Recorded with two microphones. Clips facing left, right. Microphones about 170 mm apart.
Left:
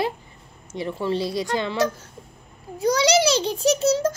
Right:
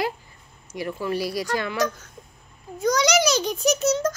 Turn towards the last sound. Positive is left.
turn(degrees=30)  # may be behind; listen again after turning